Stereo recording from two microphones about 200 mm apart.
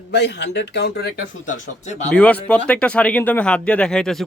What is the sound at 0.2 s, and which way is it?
Speech, 55° left (ahead or behind).